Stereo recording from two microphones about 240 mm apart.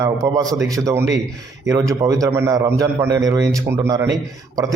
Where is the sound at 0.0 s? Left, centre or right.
Centre.